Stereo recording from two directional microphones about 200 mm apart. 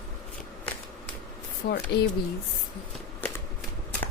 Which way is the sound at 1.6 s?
55° left (ahead or behind).